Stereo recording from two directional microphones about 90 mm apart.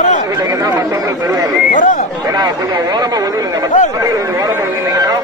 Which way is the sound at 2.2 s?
45° right (ahead or behind).